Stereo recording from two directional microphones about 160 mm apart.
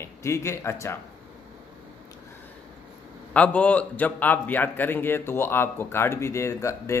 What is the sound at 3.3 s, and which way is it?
A man's voice, 10° left (ahead or behind).